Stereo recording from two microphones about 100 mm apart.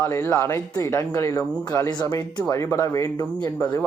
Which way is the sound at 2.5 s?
30° left (ahead or behind).